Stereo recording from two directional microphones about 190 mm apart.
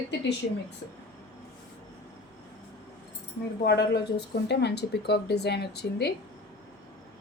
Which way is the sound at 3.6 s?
60° left (ahead or behind).